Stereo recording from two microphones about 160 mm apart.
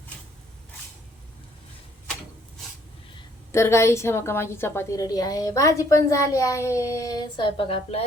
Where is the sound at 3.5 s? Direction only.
15° left (ahead or behind).